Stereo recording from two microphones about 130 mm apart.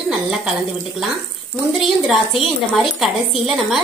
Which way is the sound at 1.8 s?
Centre (ahead or behind).